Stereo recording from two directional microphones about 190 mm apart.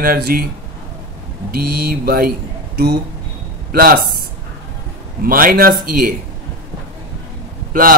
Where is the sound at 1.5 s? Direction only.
50° right (ahead or behind).